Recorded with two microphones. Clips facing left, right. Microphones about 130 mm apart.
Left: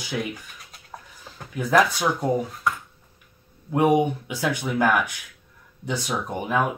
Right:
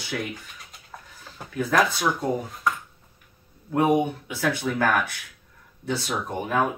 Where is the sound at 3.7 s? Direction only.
15° left (ahead or behind).